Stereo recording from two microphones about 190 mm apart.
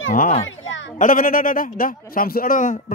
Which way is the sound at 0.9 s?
45° left (ahead or behind).